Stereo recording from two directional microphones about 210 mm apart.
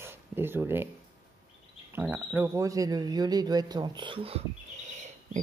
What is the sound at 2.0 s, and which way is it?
Speech, 10° right (ahead or behind).